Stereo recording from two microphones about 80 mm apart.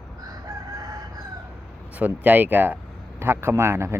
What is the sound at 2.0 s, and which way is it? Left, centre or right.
Speech, centre.